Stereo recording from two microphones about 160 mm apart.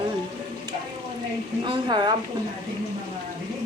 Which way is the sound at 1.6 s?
30° right (ahead or behind).